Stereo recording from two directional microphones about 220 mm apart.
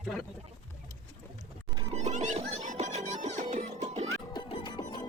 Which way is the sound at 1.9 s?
30° right (ahead or behind).